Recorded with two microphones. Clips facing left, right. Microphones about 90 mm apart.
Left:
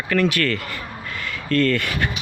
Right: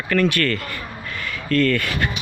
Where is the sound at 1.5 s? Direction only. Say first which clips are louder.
Right 1 dB; 30° left (ahead or behind).